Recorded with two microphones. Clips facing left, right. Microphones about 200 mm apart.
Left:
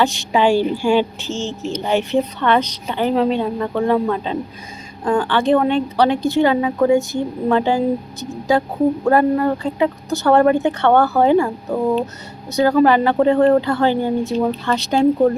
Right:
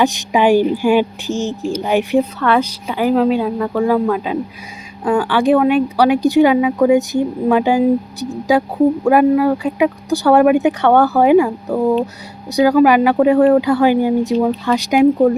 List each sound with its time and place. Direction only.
0.0 s a woman's voice: 15° right (ahead or behind)
12.5 s speech: 10° right (ahead or behind)